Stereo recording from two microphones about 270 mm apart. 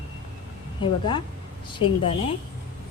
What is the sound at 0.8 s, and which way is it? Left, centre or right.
Speech, centre.